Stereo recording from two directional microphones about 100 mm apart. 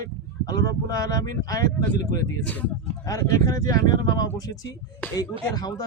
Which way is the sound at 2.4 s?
15° left (ahead or behind).